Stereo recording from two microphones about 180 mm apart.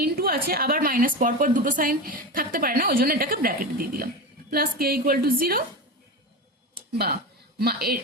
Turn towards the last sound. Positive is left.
turn(degrees=-60)  # may be behind; listen again after turning